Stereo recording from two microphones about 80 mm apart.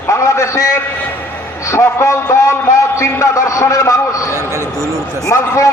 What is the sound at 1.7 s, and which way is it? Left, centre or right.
A man's voice, left.